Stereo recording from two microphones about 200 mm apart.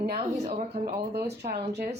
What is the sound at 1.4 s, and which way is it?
Speech, 55° right (ahead or behind).